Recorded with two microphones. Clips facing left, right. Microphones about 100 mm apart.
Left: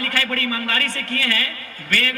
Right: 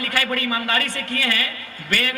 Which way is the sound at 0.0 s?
20° right (ahead or behind).